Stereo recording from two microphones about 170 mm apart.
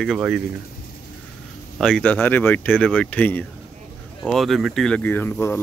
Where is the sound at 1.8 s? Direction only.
5° left (ahead or behind).